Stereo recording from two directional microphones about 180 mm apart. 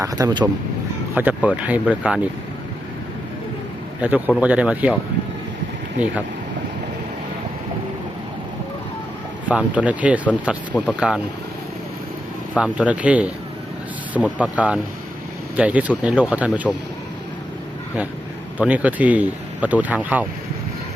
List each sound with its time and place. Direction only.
0.0 s speech: 20° right (ahead or behind)
1.1 s speech: 10° right (ahead or behind)
4.0 s speech: 5° right (ahead or behind)
9.5 s speech: 5° right (ahead or behind)
12.5 s speech: 5° right (ahead or behind)
14.3 s speech: 5° right (ahead or behind)
18.6 s speech: 10° right (ahead or behind)